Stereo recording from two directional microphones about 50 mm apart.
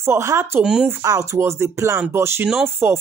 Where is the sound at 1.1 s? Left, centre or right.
Right.